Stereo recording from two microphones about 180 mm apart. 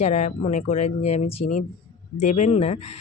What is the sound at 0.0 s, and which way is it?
A woman's voice, 40° left (ahead or behind).